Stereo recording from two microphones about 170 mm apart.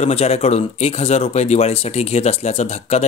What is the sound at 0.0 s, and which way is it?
Speech, 35° left (ahead or behind).